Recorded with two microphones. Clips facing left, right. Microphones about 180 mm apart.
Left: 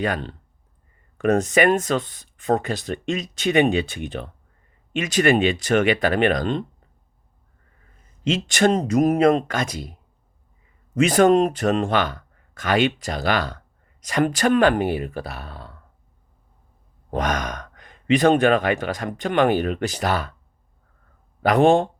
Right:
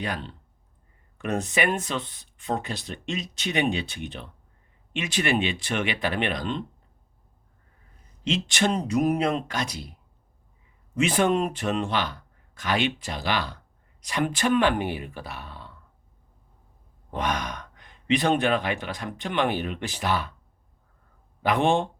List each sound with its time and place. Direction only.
0.0 s speech: 50° left (ahead or behind)
8.3 s speech: 45° left (ahead or behind)
11.0 s speech: 40° left (ahead or behind)
17.1 s speech: 45° left (ahead or behind)
21.4 s speech: 40° left (ahead or behind)